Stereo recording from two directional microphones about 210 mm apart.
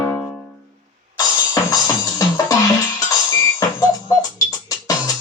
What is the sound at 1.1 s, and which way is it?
Music, 15° left (ahead or behind).